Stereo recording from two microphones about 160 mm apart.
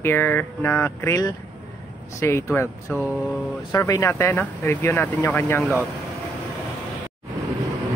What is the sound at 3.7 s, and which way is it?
Speech, 20° left (ahead or behind).